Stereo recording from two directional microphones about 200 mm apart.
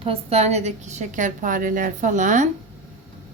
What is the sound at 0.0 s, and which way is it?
A woman's voice, 30° right (ahead or behind).